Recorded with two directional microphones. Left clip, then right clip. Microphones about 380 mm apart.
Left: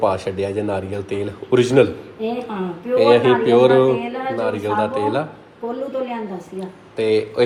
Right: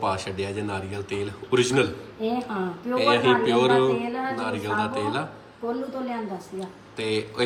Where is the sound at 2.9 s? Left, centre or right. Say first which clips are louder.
Left 7 dB; centre.